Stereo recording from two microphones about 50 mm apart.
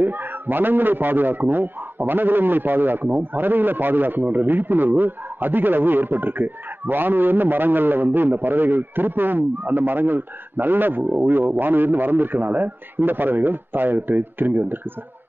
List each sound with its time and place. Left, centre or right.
0.0 s a man's voice: right